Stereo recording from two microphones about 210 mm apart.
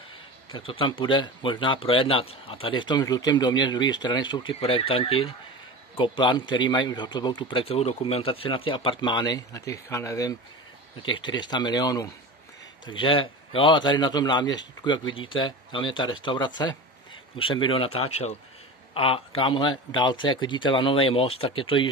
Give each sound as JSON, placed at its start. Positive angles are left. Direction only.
{"t": 0.5, "sound": "speech", "side_deg": 25}